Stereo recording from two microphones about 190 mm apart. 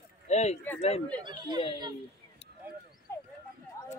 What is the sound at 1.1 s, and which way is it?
Speech, 20° right (ahead or behind).